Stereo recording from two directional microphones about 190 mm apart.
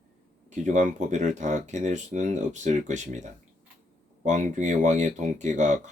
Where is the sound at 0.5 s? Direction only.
40° right (ahead or behind).